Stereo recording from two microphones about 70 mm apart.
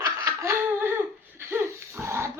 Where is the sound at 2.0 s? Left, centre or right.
Right.